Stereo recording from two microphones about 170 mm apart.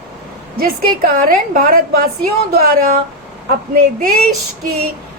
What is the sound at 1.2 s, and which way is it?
A woman's voice, 55° right (ahead or behind).